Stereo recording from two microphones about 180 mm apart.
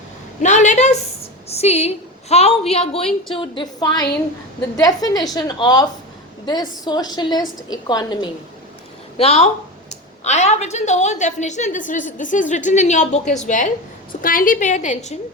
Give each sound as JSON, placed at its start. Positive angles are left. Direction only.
{"t": 0.4, "sound": "a woman's voice", "side_deg": 40}
{"t": 9.1, "sound": "a woman's voice", "side_deg": 35}